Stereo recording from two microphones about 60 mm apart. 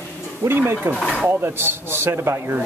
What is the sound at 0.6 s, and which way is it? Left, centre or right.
Speech, right.